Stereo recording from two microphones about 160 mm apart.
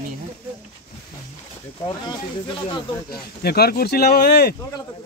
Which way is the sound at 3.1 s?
80° left.